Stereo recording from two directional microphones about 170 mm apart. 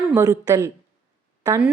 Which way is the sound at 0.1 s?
20° right (ahead or behind).